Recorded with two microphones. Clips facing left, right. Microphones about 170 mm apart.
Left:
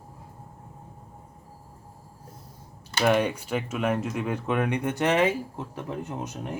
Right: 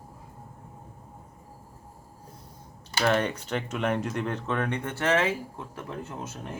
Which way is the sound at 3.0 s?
10° left (ahead or behind).